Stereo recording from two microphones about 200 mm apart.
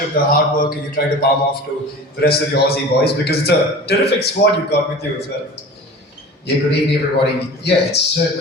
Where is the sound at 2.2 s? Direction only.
50° left (ahead or behind).